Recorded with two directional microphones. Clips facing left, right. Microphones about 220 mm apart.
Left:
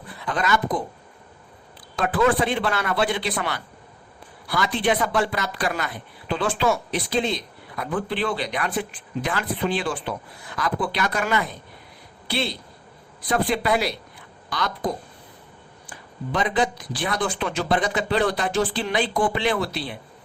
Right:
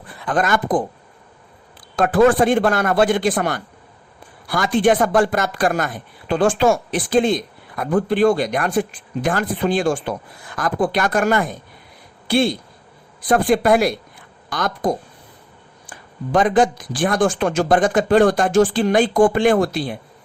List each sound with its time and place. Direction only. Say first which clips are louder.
0.3 s speech: right 5 dB; 50° right (ahead or behind)
2.0 s speech: right 7 dB; 45° right (ahead or behind)